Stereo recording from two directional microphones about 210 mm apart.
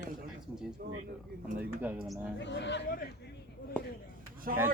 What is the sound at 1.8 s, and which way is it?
Speech, 10° right (ahead or behind).